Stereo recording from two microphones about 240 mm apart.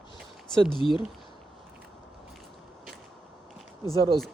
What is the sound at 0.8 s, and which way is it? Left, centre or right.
Speech, left.